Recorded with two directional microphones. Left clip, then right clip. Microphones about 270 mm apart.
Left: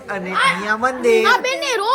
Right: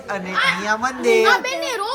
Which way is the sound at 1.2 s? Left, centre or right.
Left.